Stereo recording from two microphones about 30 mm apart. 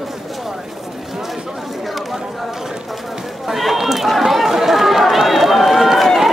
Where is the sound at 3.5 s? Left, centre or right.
Centre.